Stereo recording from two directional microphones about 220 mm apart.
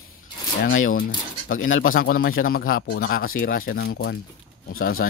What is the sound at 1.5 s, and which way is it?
Speech, 60° left (ahead or behind).